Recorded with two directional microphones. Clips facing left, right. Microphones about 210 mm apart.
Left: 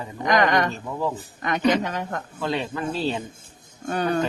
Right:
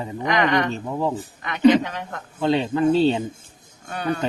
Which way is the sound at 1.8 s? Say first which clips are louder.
Left 3 dB; 45° left (ahead or behind).